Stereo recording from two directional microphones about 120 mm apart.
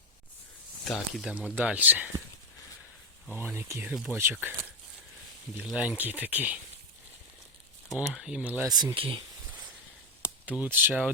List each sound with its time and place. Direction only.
0.9 s speech: centre (ahead or behind)
1.3 s speech: 10° right (ahead or behind)
3.3 s speech: 20° right (ahead or behind)
3.9 s speech: 5° right (ahead or behind)
4.2 s speech: 20° right (ahead or behind)
5.6 s speech: 5° right (ahead or behind)
8.1 s speech: 5° right (ahead or behind)
8.6 s speech: 30° right (ahead or behind); by 9.2 s 45° right (ahead or behind)
10.4 s speech: 10° right (ahead or behind)